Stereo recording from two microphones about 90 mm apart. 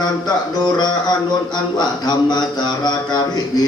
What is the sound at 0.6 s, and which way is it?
Speech, 50° left (ahead or behind).